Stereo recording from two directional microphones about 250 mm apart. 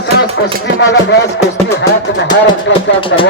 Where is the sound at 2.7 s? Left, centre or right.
Left.